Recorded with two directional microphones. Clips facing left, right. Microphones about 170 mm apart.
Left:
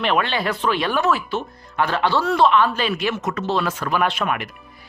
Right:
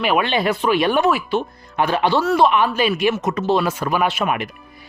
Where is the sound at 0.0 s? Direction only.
10° right (ahead or behind).